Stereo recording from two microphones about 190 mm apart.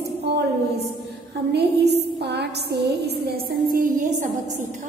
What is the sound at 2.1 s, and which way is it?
Music, 60° right (ahead or behind).